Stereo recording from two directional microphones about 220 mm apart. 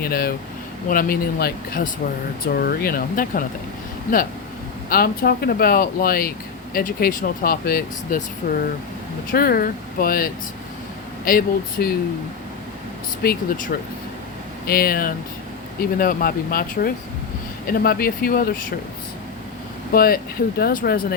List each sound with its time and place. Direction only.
0.0 s speech: 45° left (ahead or behind)
4.9 s speech: 45° left (ahead or behind)
13.2 s speech: 40° left (ahead or behind)
19.9 s speech: 40° left (ahead or behind)